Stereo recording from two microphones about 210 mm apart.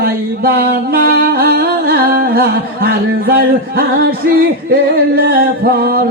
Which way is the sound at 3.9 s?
45° right (ahead or behind).